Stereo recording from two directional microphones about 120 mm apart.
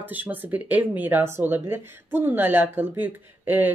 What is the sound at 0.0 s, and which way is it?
Speech, 15° right (ahead or behind).